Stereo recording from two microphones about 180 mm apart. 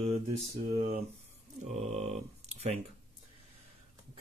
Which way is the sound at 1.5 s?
40° right (ahead or behind).